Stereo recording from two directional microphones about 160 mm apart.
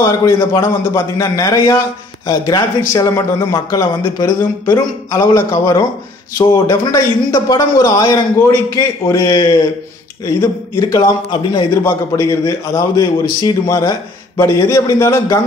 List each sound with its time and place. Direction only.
0.0 s a man's voice: 20° left (ahead or behind)